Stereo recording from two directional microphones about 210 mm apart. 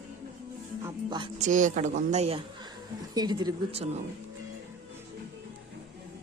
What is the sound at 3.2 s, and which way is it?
Speech, 20° right (ahead or behind).